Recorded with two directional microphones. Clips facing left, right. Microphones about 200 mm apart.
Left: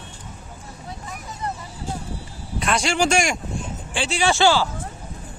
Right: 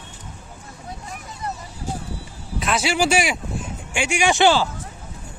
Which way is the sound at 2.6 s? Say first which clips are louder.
Even; 5° right (ahead or behind).